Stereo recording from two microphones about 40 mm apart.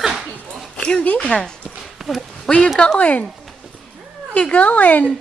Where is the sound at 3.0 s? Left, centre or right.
Left.